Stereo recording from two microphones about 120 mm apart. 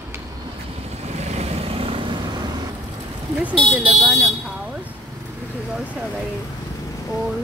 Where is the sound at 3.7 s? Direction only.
5° right (ahead or behind).